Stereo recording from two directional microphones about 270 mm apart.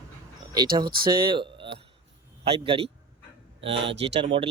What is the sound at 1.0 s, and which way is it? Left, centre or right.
A man's voice, centre.